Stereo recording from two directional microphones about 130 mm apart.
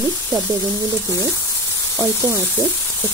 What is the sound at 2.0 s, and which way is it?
Speech, 20° right (ahead or behind).